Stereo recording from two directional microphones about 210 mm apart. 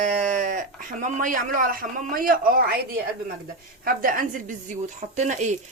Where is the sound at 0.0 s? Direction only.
35° right (ahead or behind).